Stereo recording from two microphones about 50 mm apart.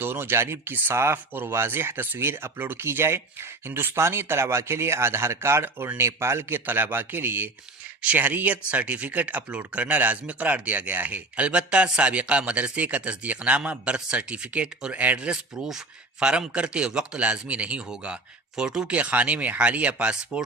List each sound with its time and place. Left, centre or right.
0.0 s speech: right
3.9 s speech: right
6.0 s speech: right
6.7 s speech: right
15.5 s speech: centre; by 17.8 s right
18.5 s speech: centre
18.9 s speech: right